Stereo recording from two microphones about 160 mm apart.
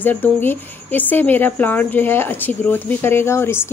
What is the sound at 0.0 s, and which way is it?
Speech, 10° left (ahead or behind).